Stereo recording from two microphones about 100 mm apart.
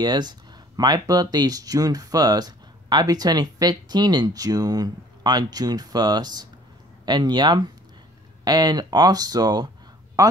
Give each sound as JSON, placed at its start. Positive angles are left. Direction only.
{"t": 0.0, "sound": "speech", "side_deg": -45}